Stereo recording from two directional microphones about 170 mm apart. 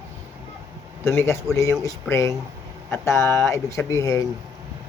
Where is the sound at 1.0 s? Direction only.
15° left (ahead or behind).